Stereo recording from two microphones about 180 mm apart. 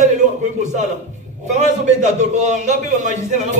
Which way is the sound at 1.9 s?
40° right (ahead or behind).